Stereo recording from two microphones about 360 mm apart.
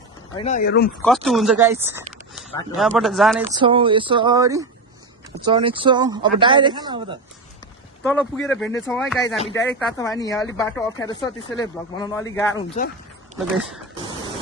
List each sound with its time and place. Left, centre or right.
0.3 s speech: centre
1.0 s speech: centre
3.4 s speech: centre
8.0 s speech: centre